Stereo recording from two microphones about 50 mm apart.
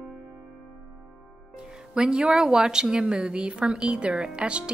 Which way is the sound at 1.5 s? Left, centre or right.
Centre.